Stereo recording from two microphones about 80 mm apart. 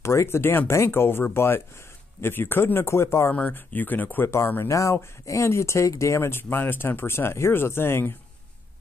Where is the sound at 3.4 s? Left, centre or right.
Left.